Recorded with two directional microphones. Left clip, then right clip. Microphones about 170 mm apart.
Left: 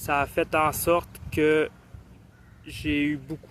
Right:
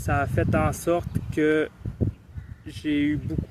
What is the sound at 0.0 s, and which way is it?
Speech, 20° right (ahead or behind).